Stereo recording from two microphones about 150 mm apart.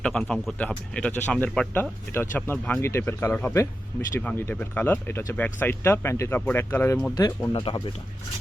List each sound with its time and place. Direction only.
0.0 s speech: 5° left (ahead or behind); by 7.6 s 25° left (ahead or behind)